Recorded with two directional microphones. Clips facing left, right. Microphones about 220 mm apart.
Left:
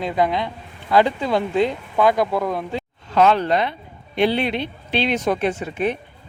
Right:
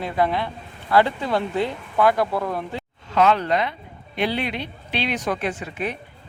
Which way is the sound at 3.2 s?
35° left (ahead or behind).